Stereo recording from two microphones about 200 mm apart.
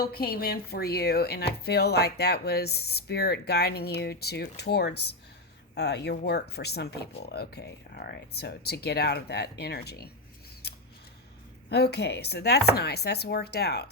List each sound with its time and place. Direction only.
0.0 s speech: 50° left (ahead or behind)
11.7 s speech: 55° left (ahead or behind)